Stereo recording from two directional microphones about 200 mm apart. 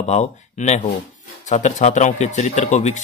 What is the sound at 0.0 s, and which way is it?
Speech, 35° left (ahead or behind).